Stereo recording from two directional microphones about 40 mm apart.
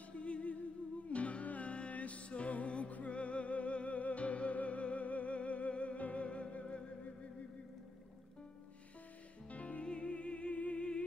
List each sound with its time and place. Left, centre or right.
0.1 s music: left
9.5 s music: left